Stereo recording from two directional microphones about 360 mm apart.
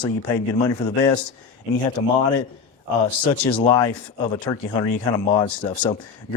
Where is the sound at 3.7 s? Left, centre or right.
Centre.